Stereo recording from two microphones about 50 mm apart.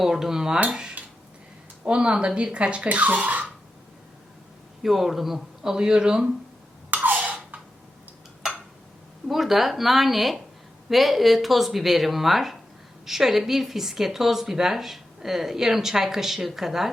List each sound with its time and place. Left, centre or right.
0.0 s speech: centre; by 3.4 s right
4.8 s a man's voice: centre
5.7 s speech: centre
6.9 s a sound: right
9.2 s speech: centre